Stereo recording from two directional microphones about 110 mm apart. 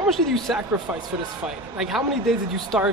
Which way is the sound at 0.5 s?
5° right (ahead or behind).